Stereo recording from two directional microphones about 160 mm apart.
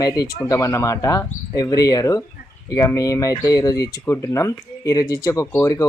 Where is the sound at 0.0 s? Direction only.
25° left (ahead or behind).